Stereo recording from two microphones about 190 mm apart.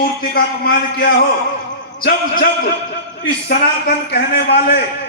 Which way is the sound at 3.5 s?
50° left (ahead or behind).